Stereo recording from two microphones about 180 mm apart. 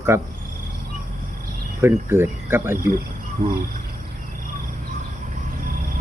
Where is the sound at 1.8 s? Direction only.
15° right (ahead or behind).